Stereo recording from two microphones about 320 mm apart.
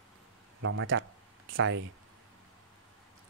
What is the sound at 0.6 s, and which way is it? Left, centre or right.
Speech, right.